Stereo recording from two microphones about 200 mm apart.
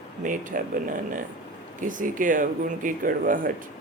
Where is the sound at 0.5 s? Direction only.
45° right (ahead or behind).